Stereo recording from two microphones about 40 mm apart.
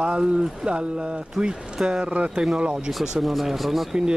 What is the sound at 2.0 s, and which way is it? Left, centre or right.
Speech, right.